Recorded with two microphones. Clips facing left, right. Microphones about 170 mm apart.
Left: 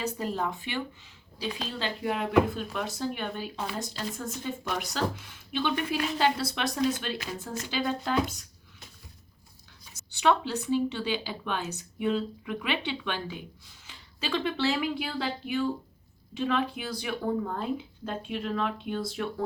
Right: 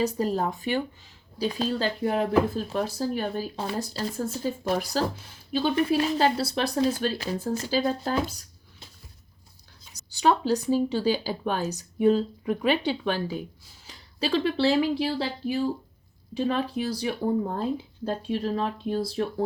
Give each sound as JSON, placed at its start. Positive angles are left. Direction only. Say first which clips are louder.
{"t": 0.0, "sound": "speech", "louder": "right 6 dB", "side_deg": -35}
{"t": 9.9, "sound": "speech", "louder": "right 2 dB", "side_deg": -35}